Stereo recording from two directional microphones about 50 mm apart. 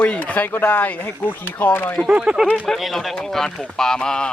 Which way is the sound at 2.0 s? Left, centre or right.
Right.